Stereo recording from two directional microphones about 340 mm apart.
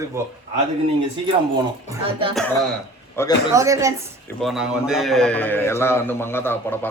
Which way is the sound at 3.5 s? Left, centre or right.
Centre.